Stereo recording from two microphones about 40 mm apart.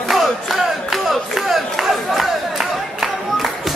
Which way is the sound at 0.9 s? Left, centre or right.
Centre.